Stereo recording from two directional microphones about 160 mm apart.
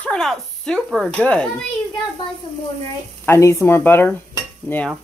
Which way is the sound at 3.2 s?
15° left (ahead or behind).